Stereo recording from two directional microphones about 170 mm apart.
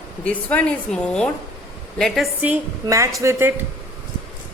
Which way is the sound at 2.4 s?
15° right (ahead or behind).